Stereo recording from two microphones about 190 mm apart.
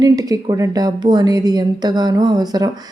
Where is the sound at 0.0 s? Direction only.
20° right (ahead or behind).